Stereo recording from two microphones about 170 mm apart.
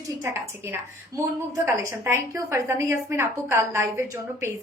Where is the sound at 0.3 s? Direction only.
10° right (ahead or behind).